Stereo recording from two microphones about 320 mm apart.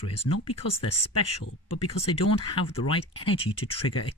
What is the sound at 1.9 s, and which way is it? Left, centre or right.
Speech, centre.